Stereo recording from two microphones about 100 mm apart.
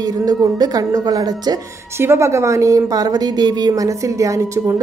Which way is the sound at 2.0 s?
25° right (ahead or behind).